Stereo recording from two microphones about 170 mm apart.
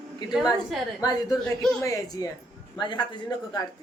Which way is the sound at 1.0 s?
20° left (ahead or behind).